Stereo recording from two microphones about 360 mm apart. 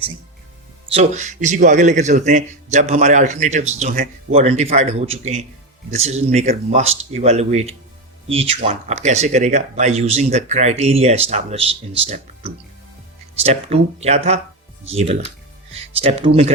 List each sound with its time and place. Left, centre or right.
0.9 s a man's voice: centre